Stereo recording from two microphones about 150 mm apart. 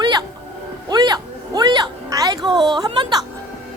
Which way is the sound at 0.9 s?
25° right (ahead or behind).